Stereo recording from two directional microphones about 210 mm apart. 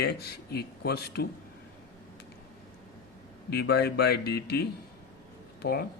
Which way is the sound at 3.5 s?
50° left (ahead or behind).